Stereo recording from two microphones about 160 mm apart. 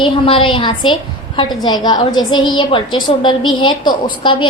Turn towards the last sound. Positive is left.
turn(degrees=30)  # may be behind; listen again after turning